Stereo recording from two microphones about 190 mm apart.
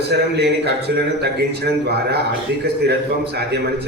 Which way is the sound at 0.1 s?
60° right (ahead or behind).